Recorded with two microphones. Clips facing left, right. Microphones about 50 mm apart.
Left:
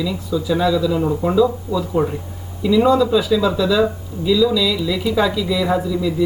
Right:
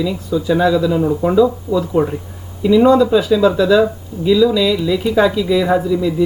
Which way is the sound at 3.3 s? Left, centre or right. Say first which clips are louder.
Right 4 dB; centre.